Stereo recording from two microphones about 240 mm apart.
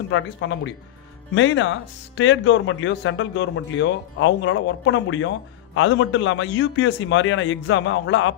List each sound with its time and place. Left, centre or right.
0.1 s speech: left